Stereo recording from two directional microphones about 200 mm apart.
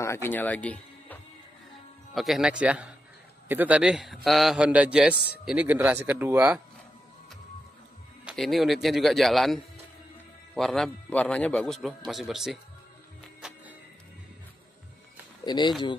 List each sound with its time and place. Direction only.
0.0 s a man's voice: 10° left (ahead or behind); by 6.6 s 5° right (ahead or behind)
8.3 s a man's voice: centre (ahead or behind)
15.4 s speech: 20° left (ahead or behind)